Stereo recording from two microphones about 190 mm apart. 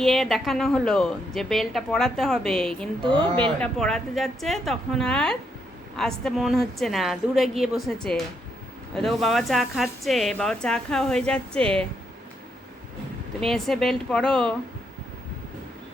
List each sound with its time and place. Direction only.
0.0 s speech: centre (ahead or behind)
3.0 s speech: 25° right (ahead or behind)
3.6 s speech: 5° left (ahead or behind)
13.4 s speech: centre (ahead or behind)